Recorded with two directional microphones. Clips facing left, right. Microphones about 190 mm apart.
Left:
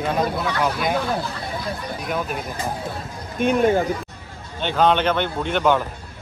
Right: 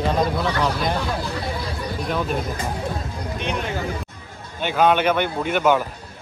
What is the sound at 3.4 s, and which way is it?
Speech, 50° left (ahead or behind).